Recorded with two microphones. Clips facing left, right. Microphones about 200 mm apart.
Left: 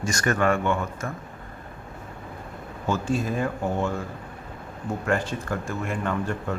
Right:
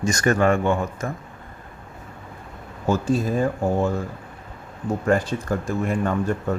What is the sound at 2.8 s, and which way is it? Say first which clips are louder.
Speech: right 4 dB; 40° right (ahead or behind).